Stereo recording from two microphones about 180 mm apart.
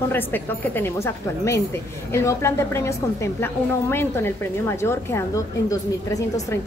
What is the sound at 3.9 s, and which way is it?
A woman's voice, 15° left (ahead or behind).